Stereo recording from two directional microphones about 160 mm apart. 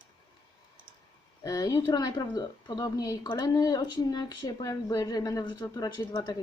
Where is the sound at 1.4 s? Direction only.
20° left (ahead or behind).